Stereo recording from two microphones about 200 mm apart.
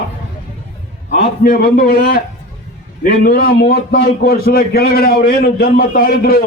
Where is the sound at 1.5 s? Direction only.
50° left (ahead or behind).